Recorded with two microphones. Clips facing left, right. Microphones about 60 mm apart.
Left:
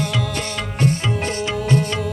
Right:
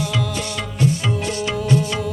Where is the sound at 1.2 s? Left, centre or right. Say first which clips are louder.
Left 1 dB; left.